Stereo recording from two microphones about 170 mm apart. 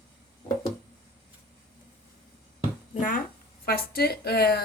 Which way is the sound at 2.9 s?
50° left (ahead or behind).